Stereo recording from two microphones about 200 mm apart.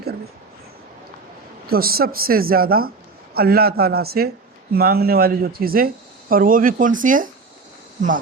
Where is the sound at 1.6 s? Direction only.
50° right (ahead or behind).